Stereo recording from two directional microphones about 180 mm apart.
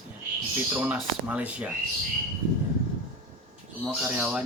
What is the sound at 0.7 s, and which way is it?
Speech, 10° right (ahead or behind).